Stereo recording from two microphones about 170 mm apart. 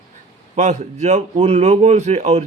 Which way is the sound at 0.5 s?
40° right (ahead or behind).